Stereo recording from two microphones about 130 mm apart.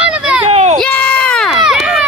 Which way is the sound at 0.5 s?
55° right (ahead or behind).